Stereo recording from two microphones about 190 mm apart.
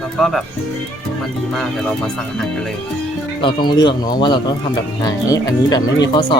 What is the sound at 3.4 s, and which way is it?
Speech, 25° left (ahead or behind).